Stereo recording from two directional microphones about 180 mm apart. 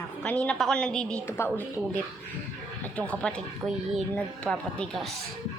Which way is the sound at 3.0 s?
5° left (ahead or behind).